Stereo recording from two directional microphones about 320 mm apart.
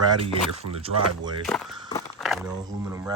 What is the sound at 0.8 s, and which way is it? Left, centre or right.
Speech, centre.